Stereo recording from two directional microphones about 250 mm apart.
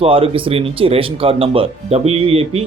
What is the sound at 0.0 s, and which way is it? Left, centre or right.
Speech, right.